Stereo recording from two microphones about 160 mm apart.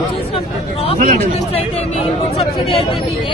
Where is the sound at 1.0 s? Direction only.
55° right (ahead or behind).